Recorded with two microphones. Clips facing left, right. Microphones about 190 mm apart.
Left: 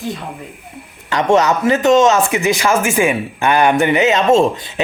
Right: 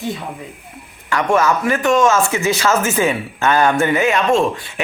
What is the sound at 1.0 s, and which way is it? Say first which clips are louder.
Speech: left 2 dB; 20° left (ahead or behind).